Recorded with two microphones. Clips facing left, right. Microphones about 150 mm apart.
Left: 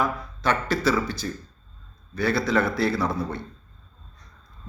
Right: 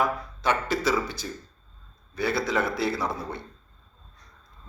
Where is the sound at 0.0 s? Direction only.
20° right (ahead or behind).